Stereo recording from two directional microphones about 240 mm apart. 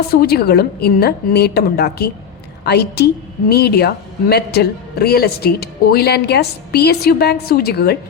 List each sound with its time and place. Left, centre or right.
0.1 s a woman's voice: left